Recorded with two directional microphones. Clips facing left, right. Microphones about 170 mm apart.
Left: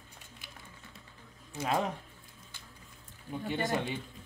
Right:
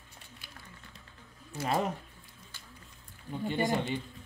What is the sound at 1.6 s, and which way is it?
Speech, 5° right (ahead or behind).